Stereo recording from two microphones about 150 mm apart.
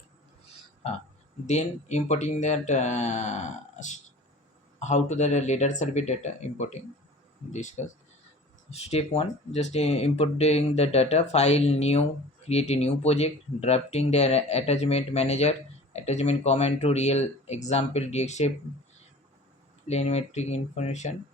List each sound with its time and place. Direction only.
1.5 s speech: 50° left (ahead or behind)
19.9 s speech: 45° left (ahead or behind)